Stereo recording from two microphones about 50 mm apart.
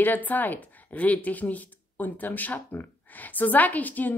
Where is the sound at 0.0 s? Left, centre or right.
Left.